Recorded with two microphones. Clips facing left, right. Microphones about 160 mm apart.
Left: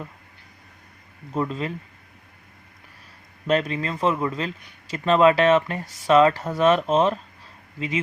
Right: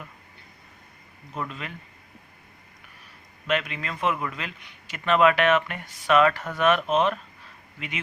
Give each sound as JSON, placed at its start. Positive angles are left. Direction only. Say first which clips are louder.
{"t": 1.3, "sound": "a man's voice", "louder": "left 8 dB", "side_deg": 30}
{"t": 3.4, "sound": "a man's voice", "louder": "left 5 dB", "side_deg": 35}